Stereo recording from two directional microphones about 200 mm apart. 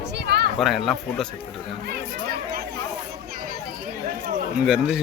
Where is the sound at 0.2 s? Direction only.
55° right (ahead or behind).